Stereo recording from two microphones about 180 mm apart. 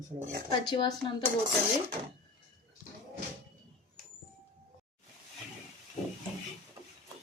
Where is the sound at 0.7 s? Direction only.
25° left (ahead or behind).